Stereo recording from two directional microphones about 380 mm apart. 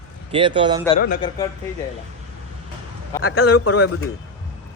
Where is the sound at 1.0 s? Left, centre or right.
Left.